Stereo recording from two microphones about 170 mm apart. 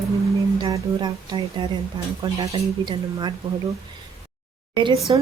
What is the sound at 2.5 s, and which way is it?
Speech, 30° right (ahead or behind).